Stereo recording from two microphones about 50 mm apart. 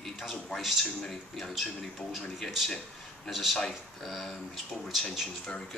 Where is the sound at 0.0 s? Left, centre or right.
Centre.